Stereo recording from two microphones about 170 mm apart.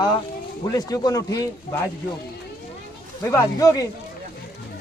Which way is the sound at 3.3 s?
20° left (ahead or behind).